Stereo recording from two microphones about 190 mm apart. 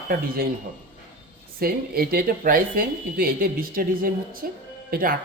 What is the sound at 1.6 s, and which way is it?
Speech, 50° right (ahead or behind).